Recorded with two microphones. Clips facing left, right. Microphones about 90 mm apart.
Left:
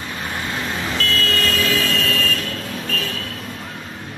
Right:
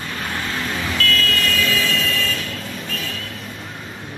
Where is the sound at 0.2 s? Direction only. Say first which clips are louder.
Even; 15° left (ahead or behind).